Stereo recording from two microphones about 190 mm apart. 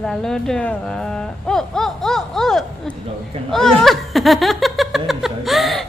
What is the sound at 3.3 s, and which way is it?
Speech, 30° right (ahead or behind).